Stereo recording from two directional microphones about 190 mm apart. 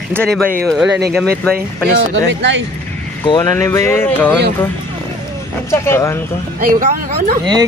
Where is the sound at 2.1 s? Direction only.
70° right (ahead or behind).